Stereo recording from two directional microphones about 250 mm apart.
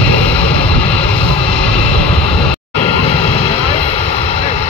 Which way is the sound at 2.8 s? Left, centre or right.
Left.